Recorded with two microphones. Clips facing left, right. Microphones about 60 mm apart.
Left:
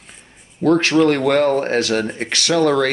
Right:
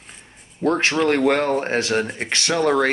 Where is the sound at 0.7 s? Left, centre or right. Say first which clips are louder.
Left 5 dB; right.